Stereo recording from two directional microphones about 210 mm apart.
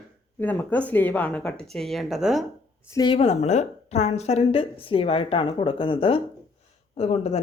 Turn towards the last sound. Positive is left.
turn(degrees=30)  # may be behind; listen again after turning